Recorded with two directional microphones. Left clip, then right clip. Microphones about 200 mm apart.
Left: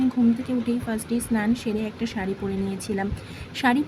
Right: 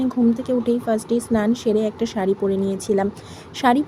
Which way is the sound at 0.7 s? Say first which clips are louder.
Right 8 dB; 15° right (ahead or behind).